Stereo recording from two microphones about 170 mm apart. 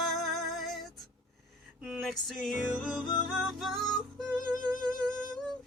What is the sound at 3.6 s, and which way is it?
Music, centre (ahead or behind).